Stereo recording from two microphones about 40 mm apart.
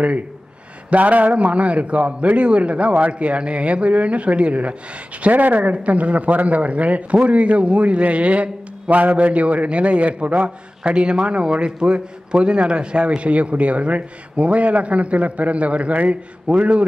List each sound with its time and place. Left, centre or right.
0.8 s a man's voice: right
5.2 s a man's voice: right